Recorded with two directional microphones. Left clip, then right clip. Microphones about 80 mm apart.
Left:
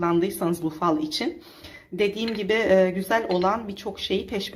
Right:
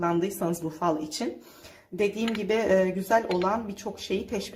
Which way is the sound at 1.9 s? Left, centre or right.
Right.